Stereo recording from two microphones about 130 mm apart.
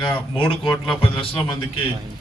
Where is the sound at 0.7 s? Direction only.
5° left (ahead or behind).